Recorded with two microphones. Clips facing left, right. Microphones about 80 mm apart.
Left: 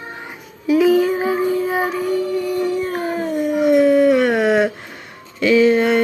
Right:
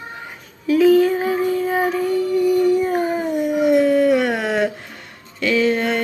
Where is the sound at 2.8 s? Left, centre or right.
Centre.